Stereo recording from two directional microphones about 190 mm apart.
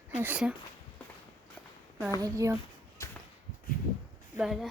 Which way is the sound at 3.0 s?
15° left (ahead or behind).